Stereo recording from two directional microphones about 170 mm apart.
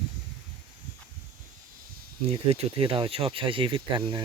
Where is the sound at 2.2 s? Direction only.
35° right (ahead or behind).